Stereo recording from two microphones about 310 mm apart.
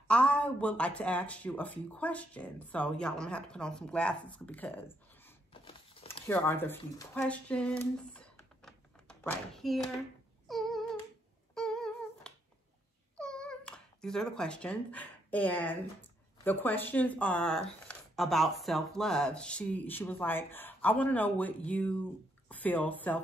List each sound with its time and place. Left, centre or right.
0.1 s speech: centre
5.5 s a sound: centre
6.2 s speech: centre
10.5 s a sound: centre
11.5 s humming: centre
13.2 s cat: centre
16.4 s speech: centre